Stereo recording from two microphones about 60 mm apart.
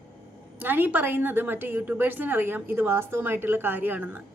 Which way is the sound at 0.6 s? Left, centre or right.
Right.